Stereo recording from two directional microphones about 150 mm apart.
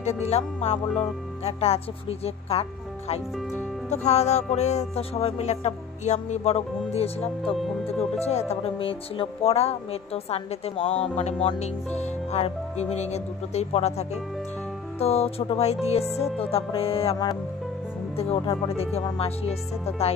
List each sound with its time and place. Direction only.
0.0 s music: 45° left (ahead or behind)
0.9 s speech: 40° left (ahead or behind)
3.9 s music: 50° left (ahead or behind)
16.3 s speech: 40° left (ahead or behind)